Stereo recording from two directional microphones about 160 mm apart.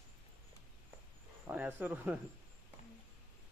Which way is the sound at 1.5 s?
10° right (ahead or behind).